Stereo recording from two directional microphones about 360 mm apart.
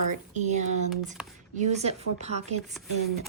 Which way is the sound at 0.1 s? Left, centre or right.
Centre.